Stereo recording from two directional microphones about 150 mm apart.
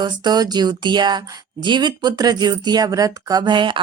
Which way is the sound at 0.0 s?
30° right (ahead or behind).